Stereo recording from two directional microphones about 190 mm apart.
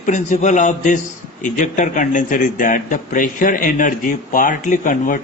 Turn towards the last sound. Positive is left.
turn(degrees=40)  # may be behind; listen again after turning